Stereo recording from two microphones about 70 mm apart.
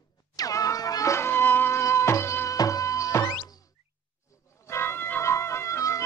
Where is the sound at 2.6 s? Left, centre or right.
Left.